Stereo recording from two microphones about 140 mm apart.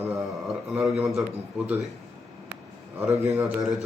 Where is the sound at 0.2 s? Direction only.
Centre (ahead or behind).